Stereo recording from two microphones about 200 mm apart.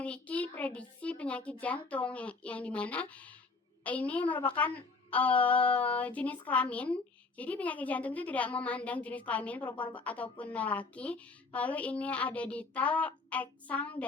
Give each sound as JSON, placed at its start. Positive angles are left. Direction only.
{"t": 0.0, "sound": "a child's voice", "side_deg": 5}
{"t": 10.2, "sound": "a woman's voice", "side_deg": 25}
{"t": 10.5, "sound": "speech", "side_deg": 5}